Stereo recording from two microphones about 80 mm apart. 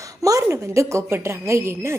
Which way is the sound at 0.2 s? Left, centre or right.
Right.